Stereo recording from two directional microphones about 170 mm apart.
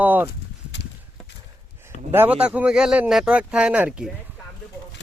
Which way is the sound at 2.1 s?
10° right (ahead or behind).